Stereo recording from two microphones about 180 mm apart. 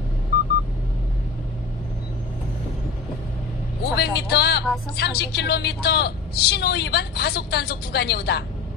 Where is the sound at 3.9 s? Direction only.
65° left (ahead or behind).